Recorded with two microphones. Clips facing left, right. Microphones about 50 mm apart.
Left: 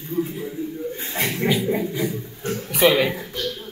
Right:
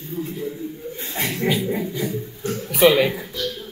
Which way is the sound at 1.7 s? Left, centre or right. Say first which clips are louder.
Left 1 dB; centre.